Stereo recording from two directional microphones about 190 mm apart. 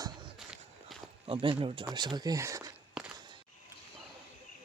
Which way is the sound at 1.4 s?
25° right (ahead or behind).